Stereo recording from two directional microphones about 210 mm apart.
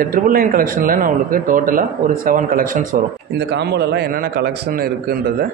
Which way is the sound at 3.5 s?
55° right (ahead or behind).